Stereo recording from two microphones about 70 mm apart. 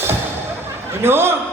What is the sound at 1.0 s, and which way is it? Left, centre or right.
Chuckle, right.